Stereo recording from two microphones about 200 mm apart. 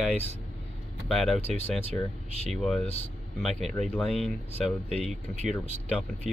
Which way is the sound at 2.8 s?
30° left (ahead or behind).